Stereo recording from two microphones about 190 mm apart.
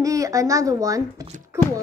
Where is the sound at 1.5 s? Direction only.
15° right (ahead or behind).